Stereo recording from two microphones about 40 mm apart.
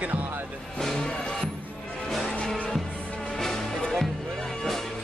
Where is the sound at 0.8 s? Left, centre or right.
Centre.